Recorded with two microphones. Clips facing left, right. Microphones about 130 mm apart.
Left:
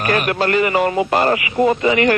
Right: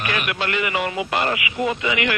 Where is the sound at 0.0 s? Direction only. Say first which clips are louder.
Left 7 dB; 40° left (ahead or behind).